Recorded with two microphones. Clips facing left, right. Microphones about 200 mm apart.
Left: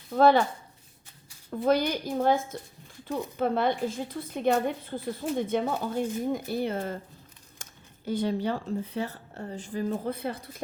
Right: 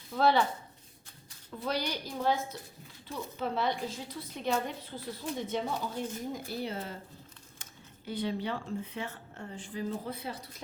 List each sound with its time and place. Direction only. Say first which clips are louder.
0.1 s speech: left 6 dB; 50° left (ahead or behind)
1.5 s a woman's voice: left 9 dB; 50° left (ahead or behind)